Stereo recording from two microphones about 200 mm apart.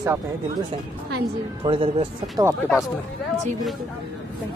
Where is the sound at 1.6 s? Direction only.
25° right (ahead or behind).